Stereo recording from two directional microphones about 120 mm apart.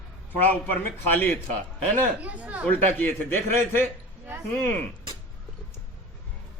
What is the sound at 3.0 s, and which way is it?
Speech, 15° left (ahead or behind).